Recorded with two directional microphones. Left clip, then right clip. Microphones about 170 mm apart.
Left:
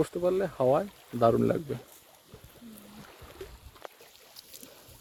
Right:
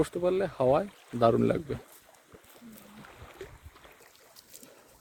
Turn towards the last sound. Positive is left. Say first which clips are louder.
# even
turn(degrees=65)  # may be behind; listen again after turning